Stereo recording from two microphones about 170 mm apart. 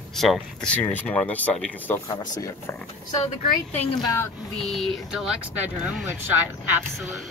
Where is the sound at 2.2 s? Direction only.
20° left (ahead or behind).